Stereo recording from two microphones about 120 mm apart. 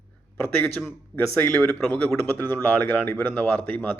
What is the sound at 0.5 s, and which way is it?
Speech, 15° left (ahead or behind).